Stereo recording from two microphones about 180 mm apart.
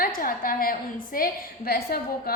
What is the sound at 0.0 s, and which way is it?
A woman's voice, 55° left (ahead or behind).